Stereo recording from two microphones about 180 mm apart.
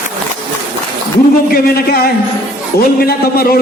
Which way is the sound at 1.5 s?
55° left (ahead or behind).